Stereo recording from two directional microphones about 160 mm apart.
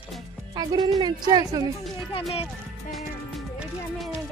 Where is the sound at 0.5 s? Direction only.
25° right (ahead or behind).